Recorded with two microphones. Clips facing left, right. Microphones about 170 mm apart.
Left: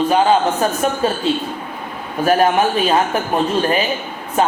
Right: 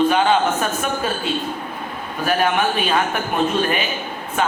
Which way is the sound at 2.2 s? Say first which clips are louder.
Left 5 dB; 35° left (ahead or behind).